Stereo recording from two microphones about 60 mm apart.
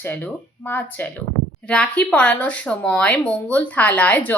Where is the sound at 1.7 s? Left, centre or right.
Centre.